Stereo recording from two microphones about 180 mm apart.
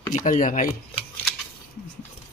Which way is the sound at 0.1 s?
45° left (ahead or behind).